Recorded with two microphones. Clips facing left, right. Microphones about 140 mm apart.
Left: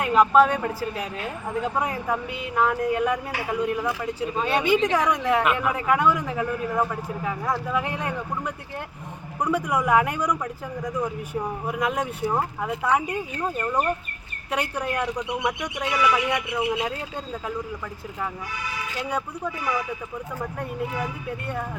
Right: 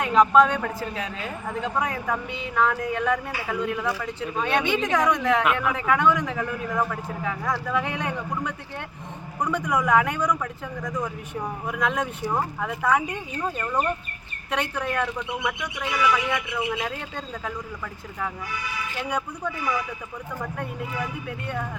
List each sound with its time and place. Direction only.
0.0 s speech: 5° left (ahead or behind)